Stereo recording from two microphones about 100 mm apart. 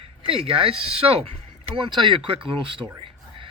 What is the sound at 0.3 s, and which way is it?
Speech, 65° right (ahead or behind).